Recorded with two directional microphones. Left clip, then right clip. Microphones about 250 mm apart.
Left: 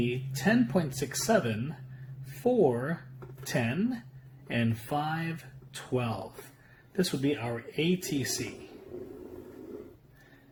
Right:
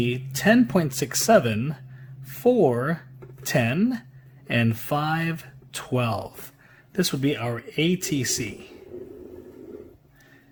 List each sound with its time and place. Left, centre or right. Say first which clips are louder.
0.0 s speech: right 7 dB; right